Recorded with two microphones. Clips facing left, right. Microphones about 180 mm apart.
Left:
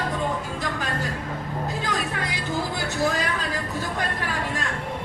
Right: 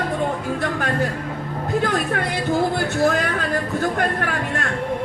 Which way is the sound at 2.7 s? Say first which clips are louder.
Right 6 dB; 55° right (ahead or behind).